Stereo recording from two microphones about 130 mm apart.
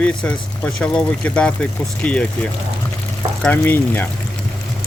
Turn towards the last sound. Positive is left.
turn(degrees=15)  # may be behind; listen again after turning